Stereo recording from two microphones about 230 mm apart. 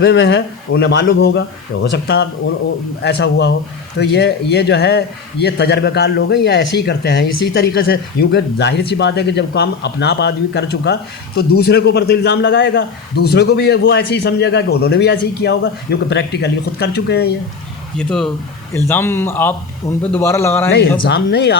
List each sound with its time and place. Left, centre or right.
0.0 s a man's voice: left
17.9 s a man's voice: centre
21.0 s a man's voice: left